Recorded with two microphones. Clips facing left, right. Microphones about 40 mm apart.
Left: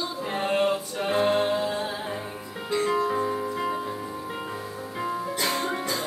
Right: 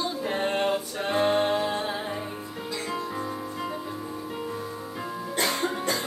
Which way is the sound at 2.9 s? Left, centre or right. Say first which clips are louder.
Left 6 dB; left.